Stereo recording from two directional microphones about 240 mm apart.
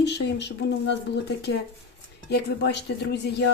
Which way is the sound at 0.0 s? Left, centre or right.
Left.